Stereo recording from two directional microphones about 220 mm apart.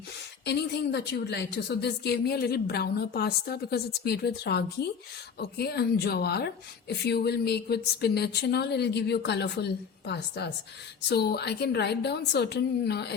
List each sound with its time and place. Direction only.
0.4 s a woman's voice: 50° left (ahead or behind)